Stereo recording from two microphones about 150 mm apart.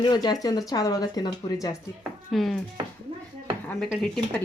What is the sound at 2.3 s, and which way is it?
Speech, centre (ahead or behind).